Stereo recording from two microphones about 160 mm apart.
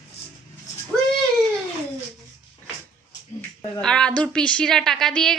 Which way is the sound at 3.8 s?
5° left (ahead or behind).